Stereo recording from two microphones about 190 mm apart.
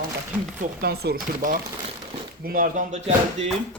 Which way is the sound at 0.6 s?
55° right (ahead or behind).